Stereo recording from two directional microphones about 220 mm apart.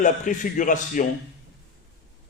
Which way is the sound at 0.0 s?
35° left (ahead or behind).